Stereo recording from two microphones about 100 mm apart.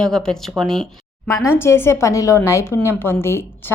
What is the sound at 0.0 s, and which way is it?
Speech, 5° left (ahead or behind).